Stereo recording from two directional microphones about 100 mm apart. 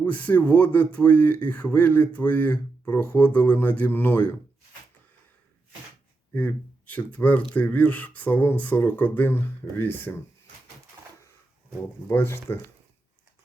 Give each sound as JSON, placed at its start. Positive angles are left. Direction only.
{"t": 0.0, "sound": "speech", "side_deg": 15}
{"t": 6.3, "sound": "speech", "side_deg": 15}
{"t": 12.0, "sound": "speech", "side_deg": 25}